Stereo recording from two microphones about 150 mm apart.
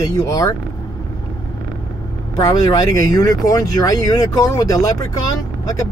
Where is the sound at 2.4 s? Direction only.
25° left (ahead or behind).